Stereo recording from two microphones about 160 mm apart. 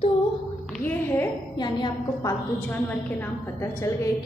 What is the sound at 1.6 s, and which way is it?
Speech, 25° left (ahead or behind).